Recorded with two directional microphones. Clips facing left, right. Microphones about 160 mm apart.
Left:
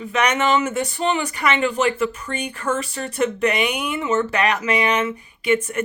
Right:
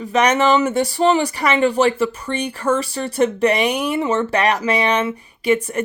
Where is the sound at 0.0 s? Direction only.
35° right (ahead or behind).